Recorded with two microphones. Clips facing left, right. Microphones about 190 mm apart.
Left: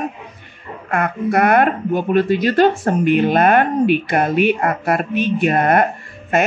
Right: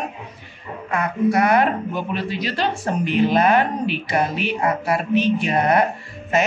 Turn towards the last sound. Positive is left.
turn(degrees=55)  # may be behind; listen again after turning